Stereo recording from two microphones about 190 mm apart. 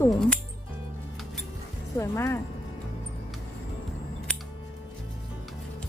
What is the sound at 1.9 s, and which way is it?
Speech, 15° left (ahead or behind).